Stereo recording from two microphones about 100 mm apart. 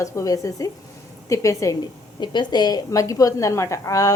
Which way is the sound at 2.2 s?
50° left (ahead or behind).